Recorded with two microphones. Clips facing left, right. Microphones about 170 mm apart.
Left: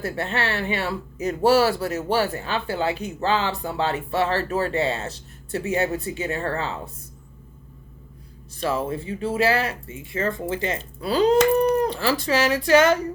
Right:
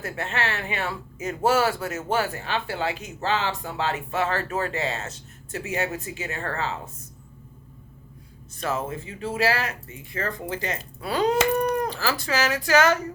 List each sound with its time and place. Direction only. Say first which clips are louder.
0.0 s speech: left 3 dB; 35° left (ahead or behind)
8.6 s speech: left 4 dB; 30° left (ahead or behind)